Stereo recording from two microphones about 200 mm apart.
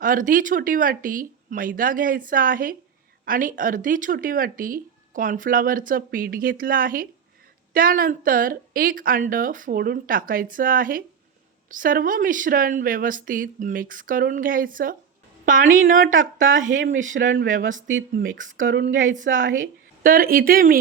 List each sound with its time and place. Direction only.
0.0 s a woman's voice: 45° right (ahead or behind)
18.6 s speech: 60° right (ahead or behind)
19.6 s speech: 45° right (ahead or behind)